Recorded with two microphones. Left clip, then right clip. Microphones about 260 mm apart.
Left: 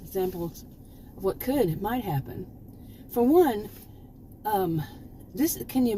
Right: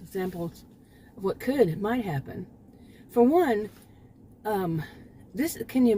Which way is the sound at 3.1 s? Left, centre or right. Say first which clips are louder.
Even; right.